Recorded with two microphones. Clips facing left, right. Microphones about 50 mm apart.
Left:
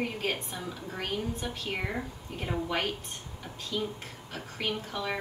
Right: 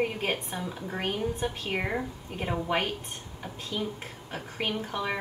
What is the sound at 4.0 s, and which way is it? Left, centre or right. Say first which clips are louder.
A woman's voice: right 3 dB; right.